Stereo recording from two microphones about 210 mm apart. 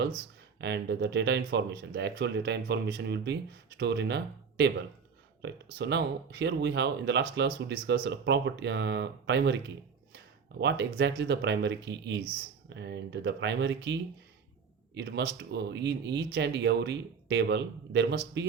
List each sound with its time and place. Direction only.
0.6 s speech: 55° right (ahead or behind)
5.7 s speech: 55° right (ahead or behind)
10.6 s speech: 55° right (ahead or behind)